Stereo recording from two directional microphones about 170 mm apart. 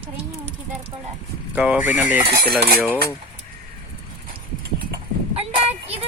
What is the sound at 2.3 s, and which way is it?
Cutlery, 65° right (ahead or behind).